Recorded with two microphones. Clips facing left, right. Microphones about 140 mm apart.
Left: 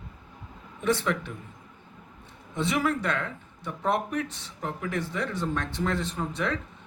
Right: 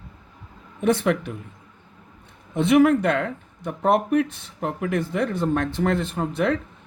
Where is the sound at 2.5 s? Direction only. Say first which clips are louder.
Right 10 dB; 60° right (ahead or behind).